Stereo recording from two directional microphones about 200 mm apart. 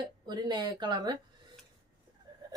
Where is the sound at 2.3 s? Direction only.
20° right (ahead or behind).